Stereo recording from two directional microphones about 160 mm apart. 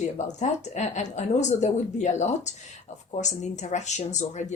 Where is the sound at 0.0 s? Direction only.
45° left (ahead or behind).